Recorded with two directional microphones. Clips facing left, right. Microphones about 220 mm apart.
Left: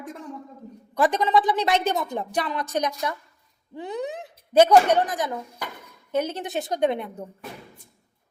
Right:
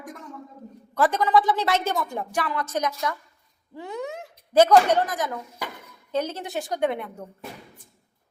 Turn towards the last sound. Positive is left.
turn(degrees=15)  # may be behind; listen again after turning